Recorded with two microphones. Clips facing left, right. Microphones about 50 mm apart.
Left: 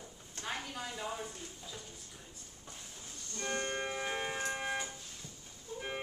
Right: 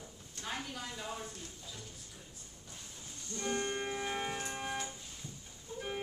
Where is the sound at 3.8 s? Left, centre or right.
Centre.